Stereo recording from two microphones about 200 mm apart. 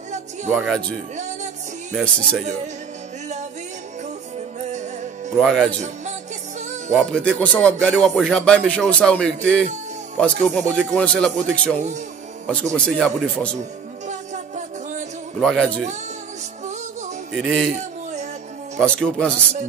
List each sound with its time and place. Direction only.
0.5 s speech: centre (ahead or behind)
1.1 s music: 35° right (ahead or behind)
1.9 s speech: centre (ahead or behind)
5.4 s speech: centre (ahead or behind)
6.9 s speech: 5° left (ahead or behind)
12.7 s speech: 5° left (ahead or behind)
13.6 s music: 35° right (ahead or behind)
15.4 s speech: centre (ahead or behind)
17.4 s speech: centre (ahead or behind)
18.8 s speech: 5° left (ahead or behind)